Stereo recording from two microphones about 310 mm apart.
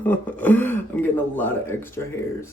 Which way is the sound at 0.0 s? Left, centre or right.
Centre.